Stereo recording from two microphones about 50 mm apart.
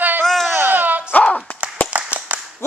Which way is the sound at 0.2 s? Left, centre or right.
Centre.